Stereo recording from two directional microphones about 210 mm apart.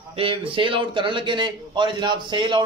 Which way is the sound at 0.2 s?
25° right (ahead or behind).